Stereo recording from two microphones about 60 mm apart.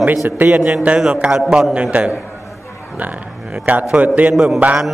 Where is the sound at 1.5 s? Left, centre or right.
Centre.